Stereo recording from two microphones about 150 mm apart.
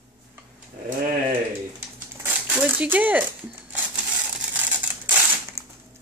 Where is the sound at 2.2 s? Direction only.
10° right (ahead or behind).